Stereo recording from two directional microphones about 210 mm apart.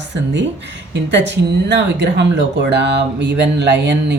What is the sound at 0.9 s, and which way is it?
Speech, 60° right (ahead or behind).